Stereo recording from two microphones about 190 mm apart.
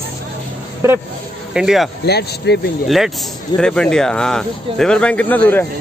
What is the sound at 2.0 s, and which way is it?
Speech, 60° left (ahead or behind).